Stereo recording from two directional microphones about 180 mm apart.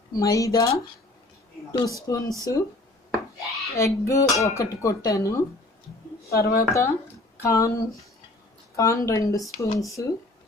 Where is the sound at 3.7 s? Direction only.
15° left (ahead or behind).